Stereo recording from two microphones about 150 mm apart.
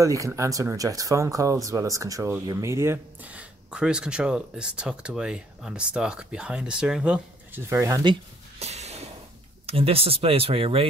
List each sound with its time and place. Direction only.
0.0 s speech: 20° right (ahead or behind); by 7.6 s 5° right (ahead or behind)
7.6 s speech: 20° right (ahead or behind)
8.5 s a sound: 45° right (ahead or behind)
9.7 s speech: 40° right (ahead or behind)